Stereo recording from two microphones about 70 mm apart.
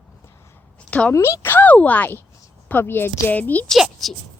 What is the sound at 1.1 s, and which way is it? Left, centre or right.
Speech, left.